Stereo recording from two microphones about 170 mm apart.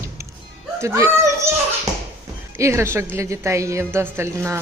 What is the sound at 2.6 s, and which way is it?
Speech, 15° right (ahead or behind).